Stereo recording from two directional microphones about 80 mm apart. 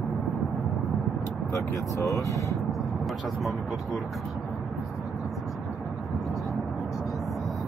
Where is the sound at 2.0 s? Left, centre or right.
Left.